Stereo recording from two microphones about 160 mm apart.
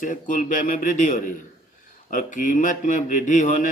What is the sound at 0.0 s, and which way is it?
A man's voice, 55° left (ahead or behind).